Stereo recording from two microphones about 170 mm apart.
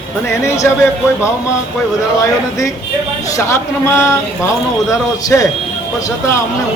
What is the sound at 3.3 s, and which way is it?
Speech, 15° left (ahead or behind).